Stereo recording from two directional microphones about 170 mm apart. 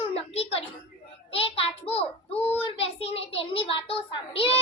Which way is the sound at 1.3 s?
35° left (ahead or behind).